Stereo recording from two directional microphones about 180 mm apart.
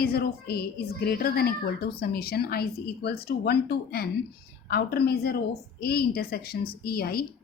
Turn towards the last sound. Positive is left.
turn(degrees=60)  # may be behind; listen again after turning